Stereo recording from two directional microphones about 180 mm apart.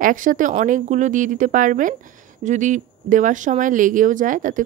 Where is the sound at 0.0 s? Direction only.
50° right (ahead or behind).